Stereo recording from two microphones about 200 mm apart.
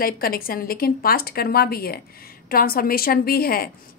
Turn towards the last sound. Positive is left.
turn(degrees=50)  # may be behind; listen again after turning